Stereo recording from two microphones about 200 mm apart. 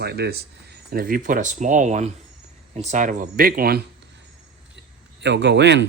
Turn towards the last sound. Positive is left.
turn(degrees=-60)  # may be behind; listen again after turning